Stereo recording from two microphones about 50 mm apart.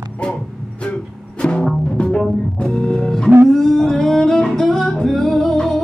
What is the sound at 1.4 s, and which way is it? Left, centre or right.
Music, centre.